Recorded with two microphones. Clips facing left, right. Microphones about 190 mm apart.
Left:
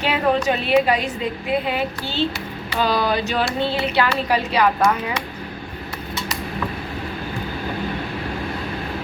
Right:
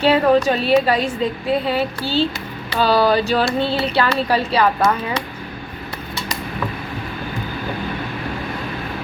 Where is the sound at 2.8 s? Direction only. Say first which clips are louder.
Right 5 dB; 15° left (ahead or behind).